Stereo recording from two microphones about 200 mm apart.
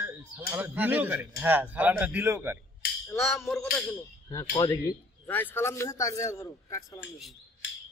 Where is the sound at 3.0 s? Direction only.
10° left (ahead or behind).